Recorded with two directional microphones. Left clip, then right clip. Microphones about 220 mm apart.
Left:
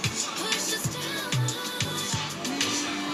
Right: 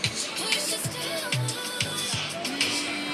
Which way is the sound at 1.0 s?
50° left (ahead or behind).